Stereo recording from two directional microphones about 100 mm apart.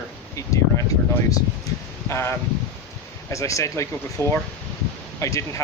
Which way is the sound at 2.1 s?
25° left (ahead or behind).